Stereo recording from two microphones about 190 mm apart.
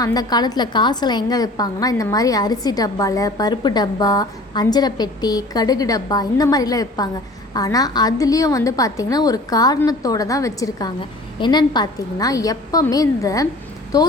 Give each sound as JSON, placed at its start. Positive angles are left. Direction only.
{"t": 0.0, "sound": "a woman's voice", "side_deg": 20}